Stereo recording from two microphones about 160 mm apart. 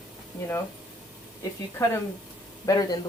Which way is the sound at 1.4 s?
15° left (ahead or behind).